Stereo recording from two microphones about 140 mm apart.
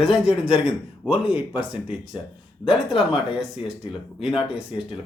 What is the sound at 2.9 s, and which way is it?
Speech, 40° left (ahead or behind).